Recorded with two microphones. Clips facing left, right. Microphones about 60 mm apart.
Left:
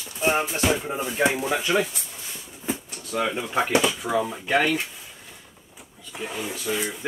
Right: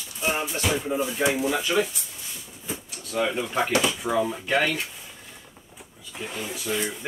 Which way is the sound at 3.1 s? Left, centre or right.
Centre.